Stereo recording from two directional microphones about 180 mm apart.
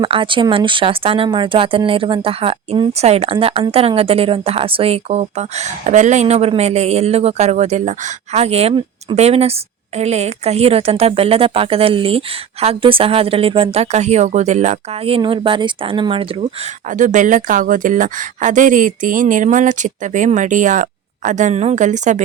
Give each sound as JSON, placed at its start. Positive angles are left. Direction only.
{"t": 0.0, "sound": "speech", "side_deg": -30}
{"t": 17.0, "sound": "speech", "side_deg": -45}